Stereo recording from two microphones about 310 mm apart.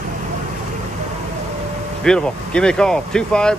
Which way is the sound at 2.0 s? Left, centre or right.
Centre.